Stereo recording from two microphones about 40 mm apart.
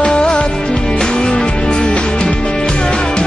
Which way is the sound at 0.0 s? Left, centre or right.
Centre.